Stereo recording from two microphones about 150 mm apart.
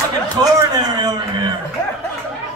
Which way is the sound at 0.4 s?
25° right (ahead or behind).